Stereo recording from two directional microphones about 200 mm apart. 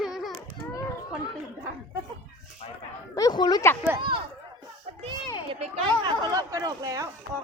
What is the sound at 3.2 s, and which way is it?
Speech, 20° left (ahead or behind).